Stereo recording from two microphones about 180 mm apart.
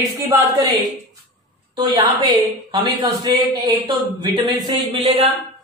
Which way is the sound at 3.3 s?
25° right (ahead or behind).